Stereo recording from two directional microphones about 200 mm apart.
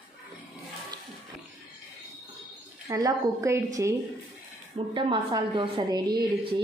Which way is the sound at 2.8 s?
15° right (ahead or behind).